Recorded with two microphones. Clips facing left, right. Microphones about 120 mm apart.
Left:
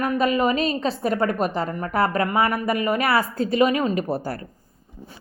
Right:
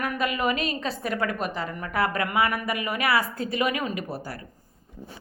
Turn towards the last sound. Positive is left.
turn(degrees=35)  # may be behind; listen again after turning